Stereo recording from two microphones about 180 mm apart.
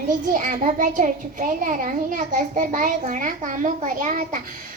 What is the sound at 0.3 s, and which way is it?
A child's voice, 45° right (ahead or behind).